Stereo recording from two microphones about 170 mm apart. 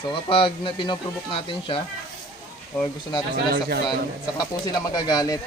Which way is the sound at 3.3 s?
65° right (ahead or behind).